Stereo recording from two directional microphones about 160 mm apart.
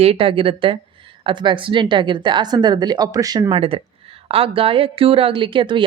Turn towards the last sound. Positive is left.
turn(degrees=-30)  # may be behind; listen again after turning